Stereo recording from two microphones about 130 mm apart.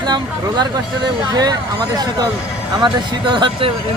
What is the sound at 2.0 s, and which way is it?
Speech, 30° right (ahead or behind).